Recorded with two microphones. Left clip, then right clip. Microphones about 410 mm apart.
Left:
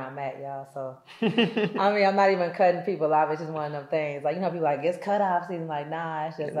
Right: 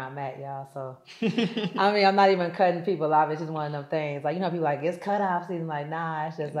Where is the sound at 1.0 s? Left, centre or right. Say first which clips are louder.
Left 4 dB; centre.